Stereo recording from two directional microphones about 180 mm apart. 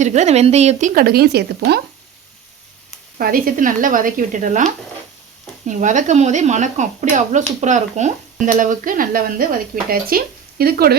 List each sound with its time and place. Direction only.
0.0 s a woman's voice: 40° right (ahead or behind)
1.0 s speech: 60° right (ahead or behind)
3.2 s speech: 50° right (ahead or behind)